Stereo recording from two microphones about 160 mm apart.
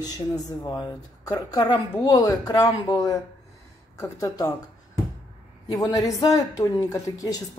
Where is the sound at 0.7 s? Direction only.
25° left (ahead or behind).